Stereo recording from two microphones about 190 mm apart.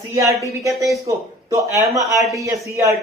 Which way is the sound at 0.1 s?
15° right (ahead or behind).